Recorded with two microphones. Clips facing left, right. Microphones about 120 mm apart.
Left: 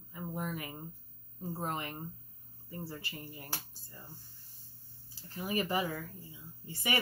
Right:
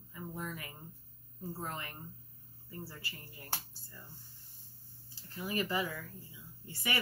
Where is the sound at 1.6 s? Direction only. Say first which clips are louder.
Left 6 dB; 20° left (ahead or behind).